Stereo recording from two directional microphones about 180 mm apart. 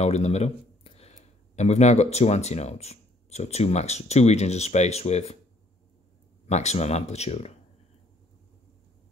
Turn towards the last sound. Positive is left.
turn(degrees=35)  # may be behind; listen again after turning